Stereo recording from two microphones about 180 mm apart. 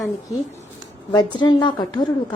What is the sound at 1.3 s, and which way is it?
Speech, 25° left (ahead or behind).